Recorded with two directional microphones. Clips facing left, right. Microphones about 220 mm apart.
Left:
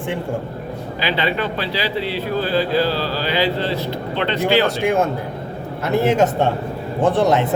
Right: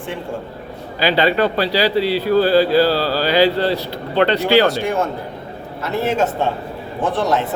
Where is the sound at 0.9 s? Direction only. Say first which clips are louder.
Right 6 dB; 40° right (ahead or behind).